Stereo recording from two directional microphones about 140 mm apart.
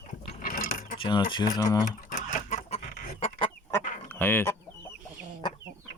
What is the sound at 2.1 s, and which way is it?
Chicken, 55° left (ahead or behind).